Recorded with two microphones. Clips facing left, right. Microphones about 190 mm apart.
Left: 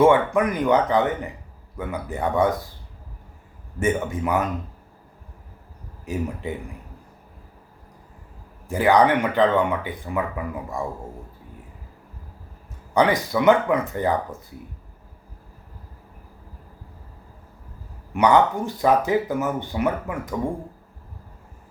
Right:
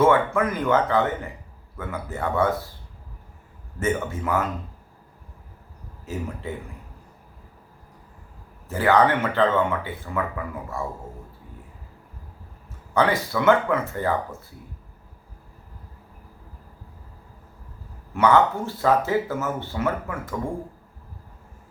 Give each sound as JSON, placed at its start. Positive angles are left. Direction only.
{"t": 0.0, "sound": "speech", "side_deg": 15}
{"t": 3.8, "sound": "speech", "side_deg": 15}
{"t": 6.1, "sound": "speech", "side_deg": 15}
{"t": 8.6, "sound": "speech", "side_deg": 15}
{"t": 12.9, "sound": "speech", "side_deg": 15}
{"t": 18.1, "sound": "speech", "side_deg": 15}